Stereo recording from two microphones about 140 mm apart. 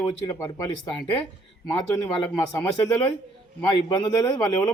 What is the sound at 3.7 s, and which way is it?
A man's voice, 30° left (ahead or behind).